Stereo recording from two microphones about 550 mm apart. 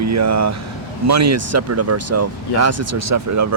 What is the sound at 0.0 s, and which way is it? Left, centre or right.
Speech, right.